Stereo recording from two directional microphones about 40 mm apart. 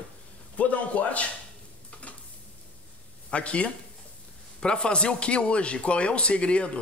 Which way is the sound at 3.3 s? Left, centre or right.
Left.